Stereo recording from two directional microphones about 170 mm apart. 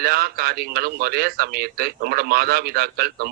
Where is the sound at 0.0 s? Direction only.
60° right (ahead or behind).